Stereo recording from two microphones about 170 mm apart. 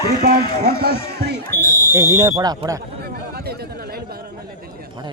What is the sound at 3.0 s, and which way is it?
Chatter, 70° right (ahead or behind).